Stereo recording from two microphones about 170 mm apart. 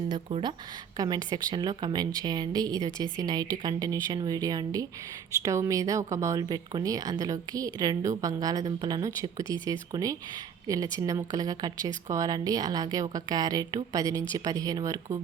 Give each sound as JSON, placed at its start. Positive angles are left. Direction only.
{"t": 0.1, "sound": "speech", "side_deg": -30}